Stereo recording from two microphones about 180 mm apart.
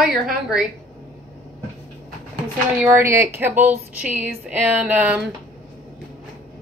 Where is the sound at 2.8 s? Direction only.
15° right (ahead or behind).